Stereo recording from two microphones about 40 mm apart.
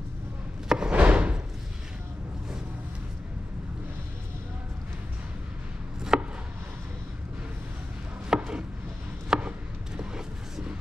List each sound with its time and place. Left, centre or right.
0.7 s a sound: right
6.1 s chopping: centre
8.4 s chopping: right
9.3 s chopping: centre
9.9 s vehicle: centre